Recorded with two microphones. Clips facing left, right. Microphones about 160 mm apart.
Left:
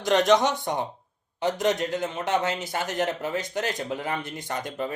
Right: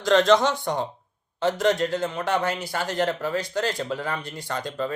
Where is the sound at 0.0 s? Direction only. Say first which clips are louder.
Right 2 dB; 20° left (ahead or behind).